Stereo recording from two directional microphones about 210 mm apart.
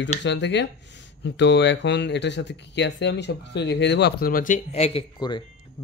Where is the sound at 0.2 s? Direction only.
55° left (ahead or behind).